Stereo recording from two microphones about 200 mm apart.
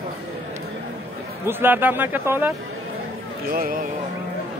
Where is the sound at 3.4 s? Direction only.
45° right (ahead or behind).